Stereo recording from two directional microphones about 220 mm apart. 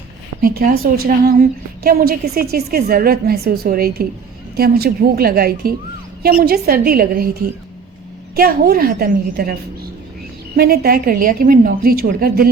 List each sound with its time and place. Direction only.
0.4 s a woman's voice: 40° right (ahead or behind)
8.4 s a woman's voice: 45° right (ahead or behind)
10.6 s a woman's voice: 45° right (ahead or behind)